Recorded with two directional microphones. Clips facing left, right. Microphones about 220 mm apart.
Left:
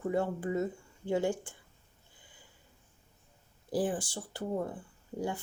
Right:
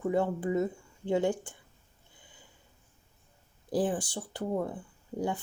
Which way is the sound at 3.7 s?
15° right (ahead or behind).